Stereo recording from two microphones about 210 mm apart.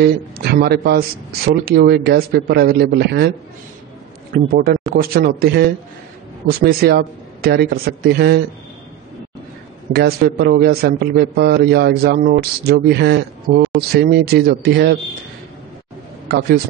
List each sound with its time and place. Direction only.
0.0 s a man's voice: 50° right (ahead or behind)
4.3 s a man's voice: 45° right (ahead or behind)
9.9 s a man's voice: 50° right (ahead or behind)